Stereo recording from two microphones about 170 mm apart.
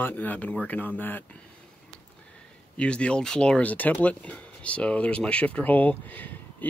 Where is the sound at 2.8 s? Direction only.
5° left (ahead or behind).